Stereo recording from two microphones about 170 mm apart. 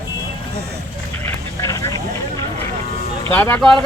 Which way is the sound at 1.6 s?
20° left (ahead or behind).